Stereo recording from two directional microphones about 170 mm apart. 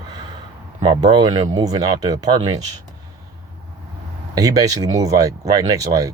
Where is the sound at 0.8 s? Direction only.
25° right (ahead or behind).